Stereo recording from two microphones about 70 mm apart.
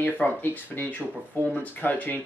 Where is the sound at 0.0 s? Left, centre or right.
Left.